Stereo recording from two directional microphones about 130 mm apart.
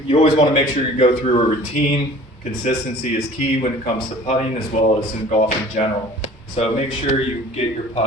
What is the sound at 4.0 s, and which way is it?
A man's voice, 50° left (ahead or behind).